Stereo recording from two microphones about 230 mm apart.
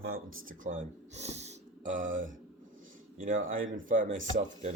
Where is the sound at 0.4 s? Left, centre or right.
Right.